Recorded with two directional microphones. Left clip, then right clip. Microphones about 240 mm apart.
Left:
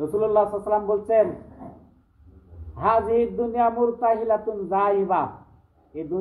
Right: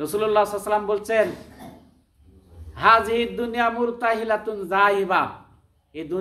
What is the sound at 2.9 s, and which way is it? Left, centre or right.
Speech, centre.